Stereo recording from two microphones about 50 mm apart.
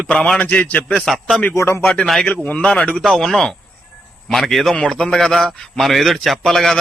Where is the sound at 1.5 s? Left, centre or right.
Left.